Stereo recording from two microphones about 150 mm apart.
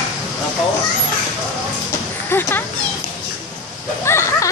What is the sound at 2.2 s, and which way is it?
Children playing, 15° left (ahead or behind).